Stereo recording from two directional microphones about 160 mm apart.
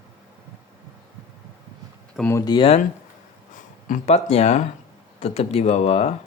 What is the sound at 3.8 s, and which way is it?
Speech, 50° left (ahead or behind).